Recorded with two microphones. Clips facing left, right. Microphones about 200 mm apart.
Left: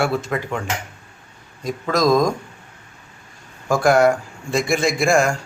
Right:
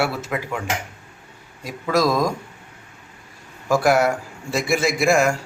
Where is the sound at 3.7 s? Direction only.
5° right (ahead or behind).